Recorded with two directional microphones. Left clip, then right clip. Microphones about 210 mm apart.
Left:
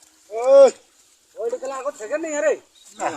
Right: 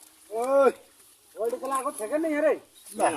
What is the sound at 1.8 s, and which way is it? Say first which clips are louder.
Speech: left 2 dB; 40° left (ahead or behind).